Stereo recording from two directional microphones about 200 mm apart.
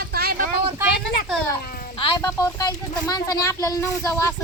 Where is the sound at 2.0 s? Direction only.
20° left (ahead or behind).